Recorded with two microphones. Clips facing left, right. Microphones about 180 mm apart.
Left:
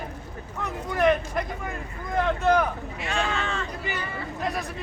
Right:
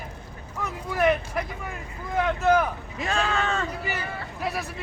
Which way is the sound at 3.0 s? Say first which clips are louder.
Right 3 dB; 40° right (ahead or behind).